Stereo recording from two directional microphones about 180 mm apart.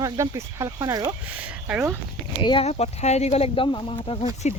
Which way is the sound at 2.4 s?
30° left (ahead or behind).